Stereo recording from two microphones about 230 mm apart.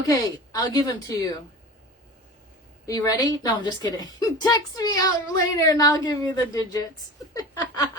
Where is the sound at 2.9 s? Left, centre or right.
Centre.